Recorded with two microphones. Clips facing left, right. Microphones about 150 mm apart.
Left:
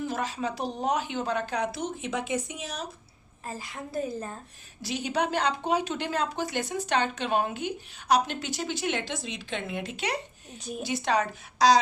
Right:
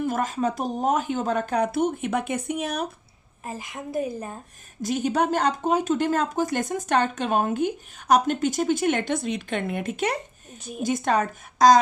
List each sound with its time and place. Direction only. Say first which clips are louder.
0.0 s speech: right 6 dB; 50° right (ahead or behind)
3.4 s a woman's voice: right 4 dB; 20° right (ahead or behind)
4.8 s speech: right 5 dB; 50° right (ahead or behind)
10.6 s a woman's voice: right 3 dB; centre (ahead or behind)
10.8 s speech: right 4 dB; 50° right (ahead or behind)